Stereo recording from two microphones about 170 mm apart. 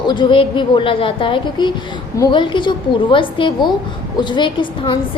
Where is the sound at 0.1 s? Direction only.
30° left (ahead or behind).